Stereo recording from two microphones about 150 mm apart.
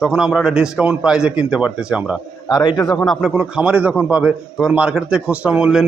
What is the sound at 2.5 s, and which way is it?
Speech, 25° left (ahead or behind).